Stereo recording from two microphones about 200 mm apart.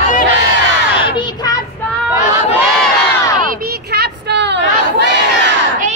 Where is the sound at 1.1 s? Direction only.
20° left (ahead or behind).